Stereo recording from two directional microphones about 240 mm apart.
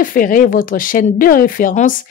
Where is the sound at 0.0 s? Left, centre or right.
Left.